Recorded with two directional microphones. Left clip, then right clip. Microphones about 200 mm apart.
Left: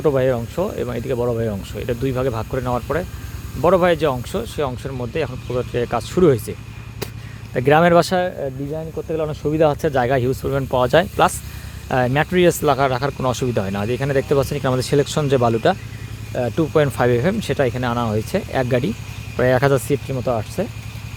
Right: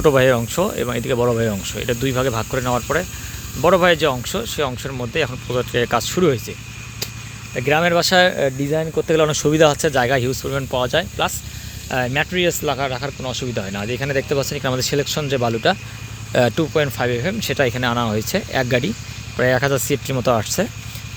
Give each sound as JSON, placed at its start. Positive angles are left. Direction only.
{"t": 0.0, "sound": "speech", "side_deg": 0}
{"t": 7.5, "sound": "speech", "side_deg": 20}
{"t": 8.4, "sound": "speech", "side_deg": -25}
{"t": 9.1, "sound": "speech", "side_deg": -10}
{"t": 9.6, "sound": "speech", "side_deg": 10}
{"t": 17.6, "sound": "speech", "side_deg": 10}
{"t": 20.1, "sound": "speech", "side_deg": -5}